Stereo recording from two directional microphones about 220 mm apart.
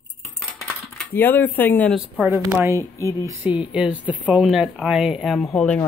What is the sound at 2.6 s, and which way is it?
Speech, 15° right (ahead or behind).